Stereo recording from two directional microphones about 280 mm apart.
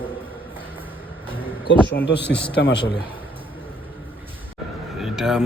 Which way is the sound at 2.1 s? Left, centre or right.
Left.